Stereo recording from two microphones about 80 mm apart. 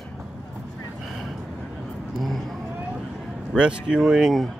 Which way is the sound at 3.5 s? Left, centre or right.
Centre.